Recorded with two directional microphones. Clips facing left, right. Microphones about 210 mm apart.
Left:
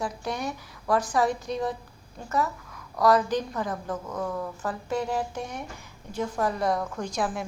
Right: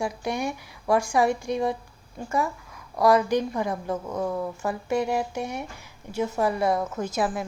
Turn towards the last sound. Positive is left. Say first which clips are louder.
# right 3 dB
turn(degrees=-5)  # may be behind; listen again after turning